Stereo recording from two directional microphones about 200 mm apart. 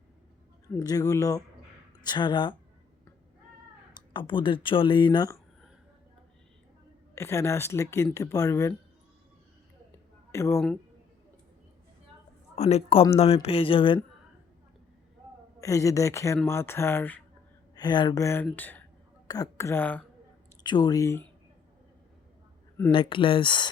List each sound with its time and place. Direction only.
0.7 s speech: 15° left (ahead or behind)
3.9 s speech: 25° left (ahead or behind)
7.2 s speech: 15° left (ahead or behind)
10.3 s speech: 15° left (ahead or behind)
12.5 s speech: 30° left (ahead or behind)
15.6 s speech: 15° left (ahead or behind)
17.7 s speech: 20° left (ahead or behind)
20.7 s speech: 20° left (ahead or behind)
22.9 s speech: 25° left (ahead or behind)